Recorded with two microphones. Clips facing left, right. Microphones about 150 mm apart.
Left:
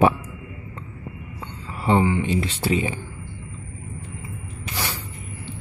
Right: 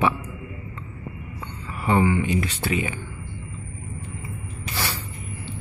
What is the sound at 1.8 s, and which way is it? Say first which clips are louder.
Speech: left 1 dB; 25° left (ahead or behind).